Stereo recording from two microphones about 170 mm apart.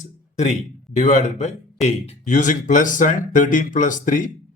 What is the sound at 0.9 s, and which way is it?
Speech, 45° left (ahead or behind).